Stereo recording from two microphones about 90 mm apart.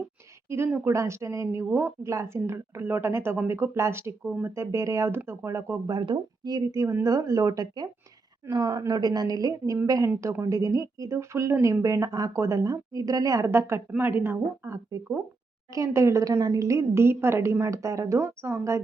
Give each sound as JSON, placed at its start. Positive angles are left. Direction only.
{"t": 0.5, "sound": "a woman's voice", "side_deg": -30}
{"t": 5.9, "sound": "speech", "side_deg": -55}
{"t": 8.4, "sound": "a woman's voice", "side_deg": -55}
{"t": 13.5, "sound": "a woman's voice", "side_deg": -30}